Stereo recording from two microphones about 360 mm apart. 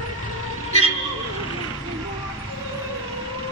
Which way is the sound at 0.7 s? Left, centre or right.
Centre.